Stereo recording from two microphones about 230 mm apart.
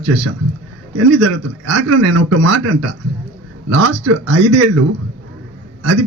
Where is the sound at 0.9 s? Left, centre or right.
Right.